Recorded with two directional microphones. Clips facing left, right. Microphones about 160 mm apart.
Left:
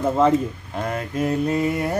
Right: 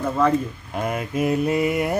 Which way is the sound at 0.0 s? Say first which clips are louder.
Left 2 dB; 25° left (ahead or behind).